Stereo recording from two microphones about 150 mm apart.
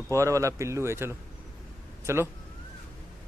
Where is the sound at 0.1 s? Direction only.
20° right (ahead or behind).